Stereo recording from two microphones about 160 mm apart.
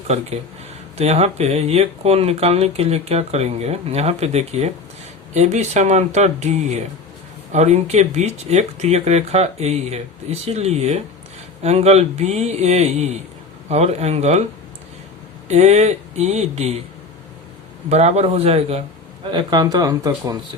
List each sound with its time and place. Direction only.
0.9 s speech: 40° right (ahead or behind)
15.4 s speech: 45° right (ahead or behind)
17.8 s speech: 40° right (ahead or behind)
19.3 s speech: 30° right (ahead or behind)